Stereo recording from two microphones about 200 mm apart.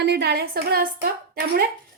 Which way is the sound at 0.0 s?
55° right (ahead or behind).